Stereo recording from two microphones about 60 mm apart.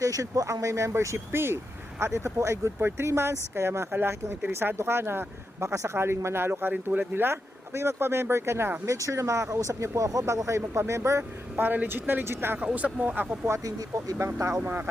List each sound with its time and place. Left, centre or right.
0.0 s speech: right
8.9 s speech: right
10.1 s speech: right
11.2 s speech: right
12.5 s speech: right
13.7 s speech: right
14.2 s speech: right
14.6 s speech: right